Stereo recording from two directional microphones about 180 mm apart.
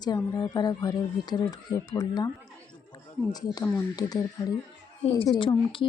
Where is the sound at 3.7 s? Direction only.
20° left (ahead or behind).